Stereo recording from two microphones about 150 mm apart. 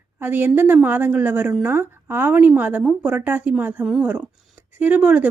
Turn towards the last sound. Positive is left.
turn(degrees=-10)  # may be behind; listen again after turning